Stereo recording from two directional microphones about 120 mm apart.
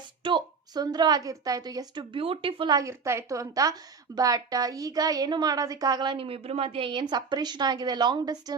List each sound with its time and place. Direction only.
0.2 s a woman's voice: 40° right (ahead or behind)
2.1 s speech: 50° right (ahead or behind)
2.7 s a woman's voice: 25° right (ahead or behind)
6.2 s a woman's voice: 55° right (ahead or behind); by 8.5 s 35° right (ahead or behind)